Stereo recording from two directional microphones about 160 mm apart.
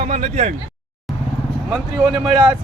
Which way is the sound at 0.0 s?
40° right (ahead or behind).